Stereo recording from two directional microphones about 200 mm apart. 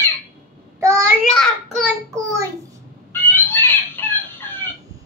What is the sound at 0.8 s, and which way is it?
Child singing, 15° right (ahead or behind).